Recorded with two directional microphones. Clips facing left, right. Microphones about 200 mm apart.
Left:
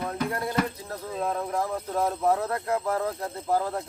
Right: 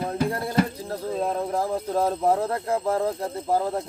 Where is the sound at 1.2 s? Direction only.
30° right (ahead or behind).